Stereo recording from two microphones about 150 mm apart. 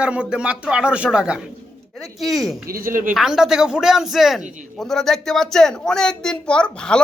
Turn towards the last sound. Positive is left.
turn(degrees=5)  # may be behind; listen again after turning